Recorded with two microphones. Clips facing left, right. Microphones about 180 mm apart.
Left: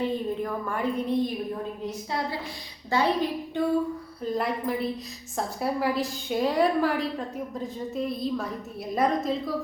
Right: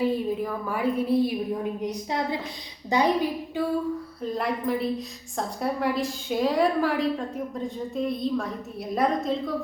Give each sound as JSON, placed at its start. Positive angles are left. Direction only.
{"t": 0.0, "sound": "a woman's voice", "side_deg": -5}
{"t": 1.8, "sound": "a woman's voice", "side_deg": -20}
{"t": 4.2, "sound": "a woman's voice", "side_deg": 0}